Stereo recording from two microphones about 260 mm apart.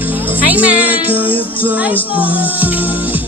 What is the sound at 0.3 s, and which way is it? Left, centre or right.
Speech, centre.